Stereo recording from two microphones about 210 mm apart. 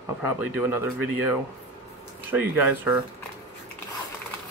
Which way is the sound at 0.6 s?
10° right (ahead or behind).